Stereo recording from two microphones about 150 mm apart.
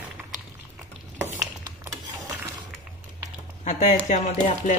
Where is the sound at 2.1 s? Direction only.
25° right (ahead or behind).